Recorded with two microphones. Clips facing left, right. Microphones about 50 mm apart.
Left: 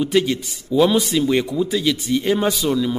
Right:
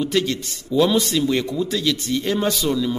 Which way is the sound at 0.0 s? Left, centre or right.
Centre.